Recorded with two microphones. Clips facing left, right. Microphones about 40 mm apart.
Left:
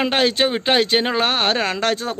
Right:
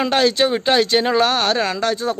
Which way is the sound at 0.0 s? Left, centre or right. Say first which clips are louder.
Right 1 dB; left.